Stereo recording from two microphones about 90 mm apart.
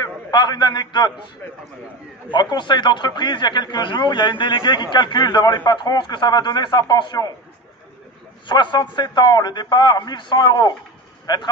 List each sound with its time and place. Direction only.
0.0 s a man's voice: 55° left (ahead or behind)
2.3 s speech: 55° left (ahead or behind)
8.5 s a man's voice: 60° left (ahead or behind)